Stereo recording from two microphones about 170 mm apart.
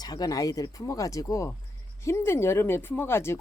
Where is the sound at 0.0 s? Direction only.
25° left (ahead or behind).